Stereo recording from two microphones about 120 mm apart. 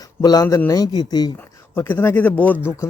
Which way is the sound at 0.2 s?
30° left (ahead or behind).